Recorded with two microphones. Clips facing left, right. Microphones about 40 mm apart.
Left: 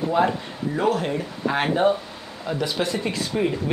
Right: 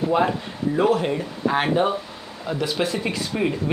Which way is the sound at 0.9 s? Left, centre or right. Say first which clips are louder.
Right 2 dB; centre.